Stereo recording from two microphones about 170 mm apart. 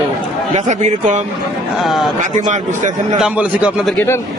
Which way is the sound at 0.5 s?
45° right (ahead or behind).